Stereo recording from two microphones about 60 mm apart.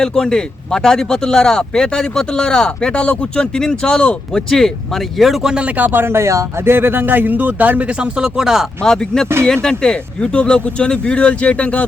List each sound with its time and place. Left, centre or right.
0.0 s speech: centre
4.3 s speech: centre
5.6 s speech: right
6.6 s a man's voice: right; by 8.6 s centre
8.8 s speech: centre